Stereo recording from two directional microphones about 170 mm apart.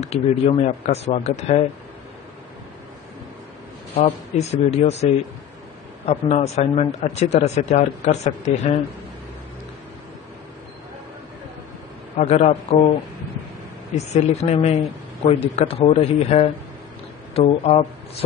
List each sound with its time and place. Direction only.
0.0 s a man's voice: 40° left (ahead or behind)
4.0 s a man's voice: 40° left (ahead or behind)
6.0 s a man's voice: 40° left (ahead or behind)
12.2 s a man's voice: 40° left (ahead or behind)
13.9 s a man's voice: 40° left (ahead or behind)